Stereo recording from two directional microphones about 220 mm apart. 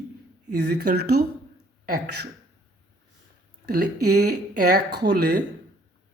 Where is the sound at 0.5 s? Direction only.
45° right (ahead or behind).